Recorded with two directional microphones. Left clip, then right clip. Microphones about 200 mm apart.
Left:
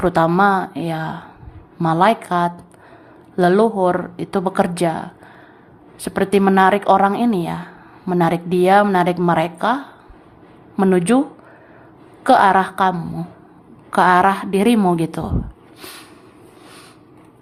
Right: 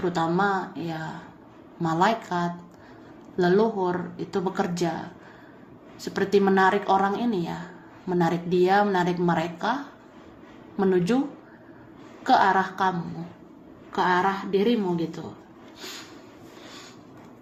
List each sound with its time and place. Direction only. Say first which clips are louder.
0.0 s speech: left 10 dB; 35° left (ahead or behind)
6.1 s speech: left 6 dB; 30° left (ahead or behind)
12.2 s speech: left 8 dB; 25° left (ahead or behind)
13.9 s a woman's voice: left 10 dB; 35° left (ahead or behind)